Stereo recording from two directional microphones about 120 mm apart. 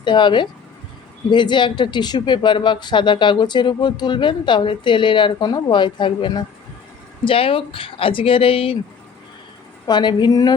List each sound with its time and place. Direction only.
0.0 s speech: 40° left (ahead or behind)
9.8 s speech: 40° left (ahead or behind)